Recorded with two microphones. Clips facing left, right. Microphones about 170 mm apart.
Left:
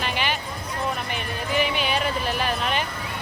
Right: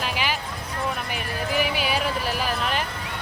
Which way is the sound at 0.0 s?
5° right (ahead or behind).